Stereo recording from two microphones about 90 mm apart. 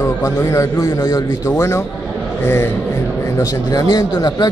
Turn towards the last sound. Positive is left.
turn(degrees=50)  # may be behind; listen again after turning